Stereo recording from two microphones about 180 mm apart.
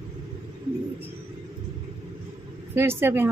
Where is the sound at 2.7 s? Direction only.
15° right (ahead or behind).